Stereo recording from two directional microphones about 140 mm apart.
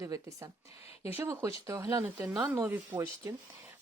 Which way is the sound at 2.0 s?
10° right (ahead or behind).